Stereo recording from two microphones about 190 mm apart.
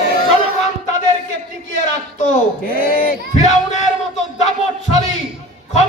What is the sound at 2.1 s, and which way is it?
Speech, 50° left (ahead or behind).